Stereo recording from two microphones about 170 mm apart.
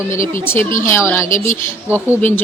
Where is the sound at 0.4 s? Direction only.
15° left (ahead or behind).